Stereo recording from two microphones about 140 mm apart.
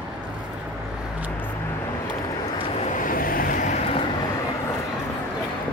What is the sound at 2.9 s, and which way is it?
Vehicle, 80° left.